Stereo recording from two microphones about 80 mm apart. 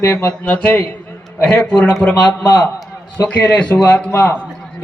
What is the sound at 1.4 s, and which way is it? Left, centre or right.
Speech, centre.